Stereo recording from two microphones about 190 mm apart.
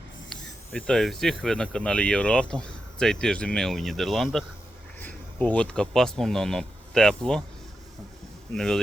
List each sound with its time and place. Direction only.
0.3 s speech: 5° left (ahead or behind)
8.5 s speech: 5° left (ahead or behind)